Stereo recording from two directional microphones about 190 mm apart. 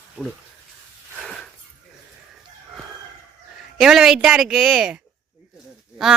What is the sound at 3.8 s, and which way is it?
Speech, centre (ahead or behind).